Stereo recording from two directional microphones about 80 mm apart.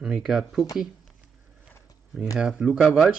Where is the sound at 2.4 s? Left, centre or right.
Centre.